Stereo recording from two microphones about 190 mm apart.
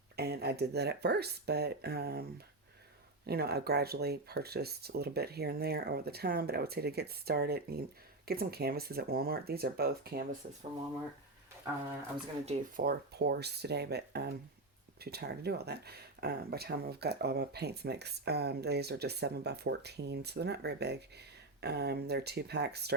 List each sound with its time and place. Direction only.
0.2 s speech: 55° right (ahead or behind)
3.2 s speech: 55° right (ahead or behind)
12.5 s speech: 50° right (ahead or behind)